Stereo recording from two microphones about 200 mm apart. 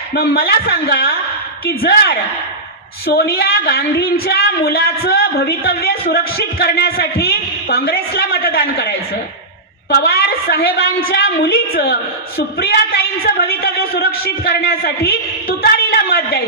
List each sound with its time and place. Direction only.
0.1 s a woman's voice: 50° left (ahead or behind)